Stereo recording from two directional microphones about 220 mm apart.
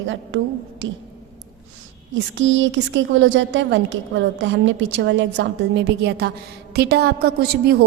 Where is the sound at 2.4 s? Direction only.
60° right (ahead or behind).